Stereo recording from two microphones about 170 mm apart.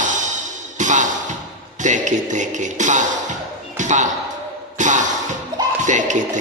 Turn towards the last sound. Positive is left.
turn(degrees=-45)  # may be behind; listen again after turning